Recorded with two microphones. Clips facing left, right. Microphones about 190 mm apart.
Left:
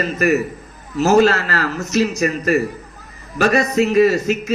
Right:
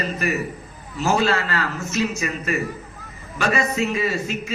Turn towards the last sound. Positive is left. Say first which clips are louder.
# left 10 dB
turn(degrees=40)  # may be behind; listen again after turning